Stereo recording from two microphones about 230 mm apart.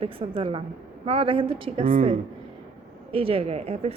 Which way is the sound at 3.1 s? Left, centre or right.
Right.